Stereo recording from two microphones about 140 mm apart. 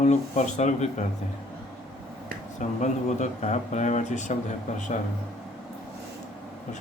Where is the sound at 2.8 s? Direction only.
55° left (ahead or behind).